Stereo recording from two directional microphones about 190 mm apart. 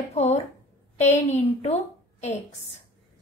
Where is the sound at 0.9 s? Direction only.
35° left (ahead or behind).